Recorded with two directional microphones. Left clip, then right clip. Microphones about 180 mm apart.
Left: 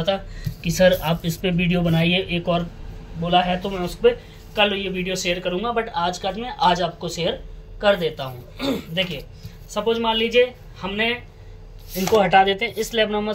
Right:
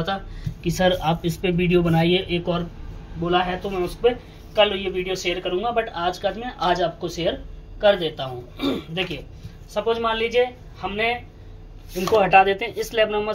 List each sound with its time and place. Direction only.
0.0 s speech: 40° right (ahead or behind)
3.3 s speech: 50° right (ahead or behind)
4.6 s speech: 35° right (ahead or behind)
12.2 s speech: 30° right (ahead or behind)